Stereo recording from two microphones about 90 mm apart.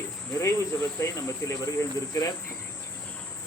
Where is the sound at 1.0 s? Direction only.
35° left (ahead or behind).